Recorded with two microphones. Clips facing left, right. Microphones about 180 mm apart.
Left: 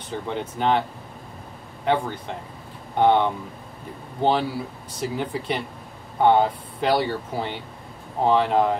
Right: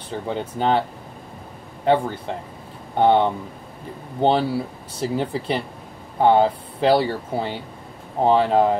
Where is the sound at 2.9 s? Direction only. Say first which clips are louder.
Right 2 dB; 35° right (ahead or behind).